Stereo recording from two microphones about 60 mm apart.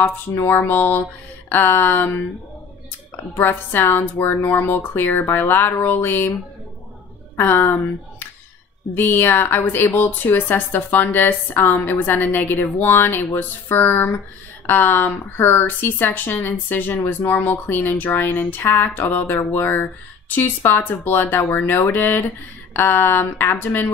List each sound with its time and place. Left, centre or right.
0.0 s speech: left
3.3 s speech: left
7.3 s speech: left
8.9 s speech: left